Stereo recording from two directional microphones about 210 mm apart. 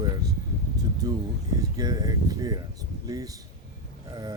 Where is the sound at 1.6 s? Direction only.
15° right (ahead or behind).